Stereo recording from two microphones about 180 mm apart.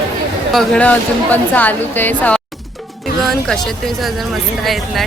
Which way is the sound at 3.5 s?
Centre (ahead or behind).